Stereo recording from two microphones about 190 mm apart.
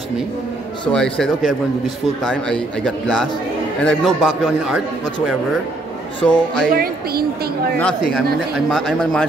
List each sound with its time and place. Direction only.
0.9 s a man's voice: 5° left (ahead or behind)
6.7 s a woman's voice: 50° right (ahead or behind)
7.8 s a man's voice: 5° left (ahead or behind)